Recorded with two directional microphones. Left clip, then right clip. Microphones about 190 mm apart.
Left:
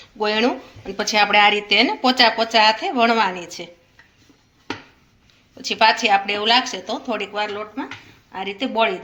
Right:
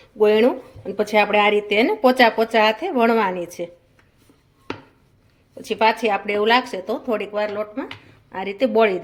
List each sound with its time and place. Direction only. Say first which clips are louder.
0.2 s speech: right 4 dB; 40° right (ahead or behind)
5.6 s speech: left 2 dB; 40° right (ahead or behind)